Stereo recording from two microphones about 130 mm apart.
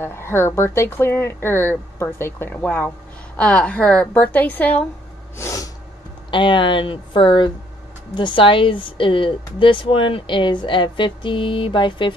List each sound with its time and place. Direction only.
0.0 s speech: 20° left (ahead or behind)
5.4 s a sound: 25° left (ahead or behind)
6.3 s speech: 40° left (ahead or behind)